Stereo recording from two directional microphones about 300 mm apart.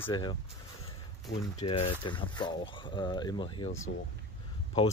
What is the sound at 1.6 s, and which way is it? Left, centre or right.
Speech, centre.